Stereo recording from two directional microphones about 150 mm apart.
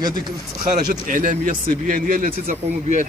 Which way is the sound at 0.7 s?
60° right (ahead or behind).